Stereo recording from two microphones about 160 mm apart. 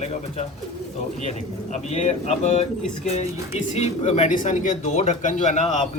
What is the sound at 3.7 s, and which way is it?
Speech, 45° left (ahead or behind).